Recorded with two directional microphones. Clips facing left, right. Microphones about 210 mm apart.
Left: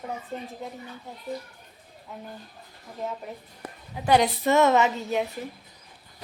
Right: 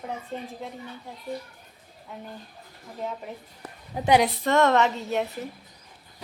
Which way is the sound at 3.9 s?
45° right (ahead or behind).